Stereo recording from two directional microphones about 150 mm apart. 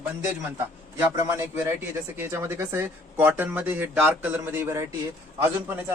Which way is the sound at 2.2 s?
15° right (ahead or behind).